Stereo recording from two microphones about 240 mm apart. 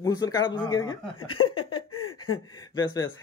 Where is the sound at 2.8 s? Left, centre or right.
Centre.